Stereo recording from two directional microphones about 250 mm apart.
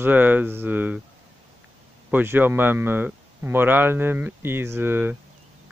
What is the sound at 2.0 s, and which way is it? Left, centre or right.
Speech, centre.